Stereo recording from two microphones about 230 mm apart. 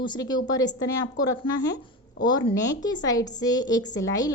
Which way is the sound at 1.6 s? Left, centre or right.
Left.